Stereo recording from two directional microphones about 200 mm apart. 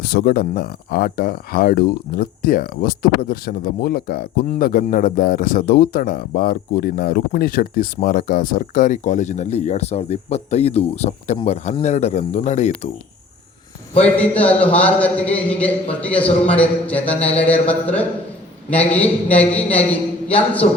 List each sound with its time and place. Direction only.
0.0 s speech: 50° left (ahead or behind); by 12.9 s 35° left (ahead or behind)
13.9 s a man's voice: 5° left (ahead or behind)